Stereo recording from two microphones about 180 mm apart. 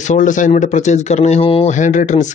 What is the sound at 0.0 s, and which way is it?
A man's voice, 45° left (ahead or behind).